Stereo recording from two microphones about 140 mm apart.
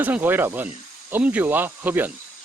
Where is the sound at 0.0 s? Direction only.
15° right (ahead or behind).